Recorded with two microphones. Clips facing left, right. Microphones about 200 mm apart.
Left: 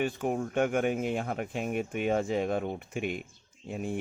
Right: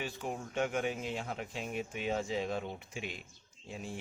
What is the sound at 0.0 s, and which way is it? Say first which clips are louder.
A man's voice: left 9 dB; 55° left (ahead or behind).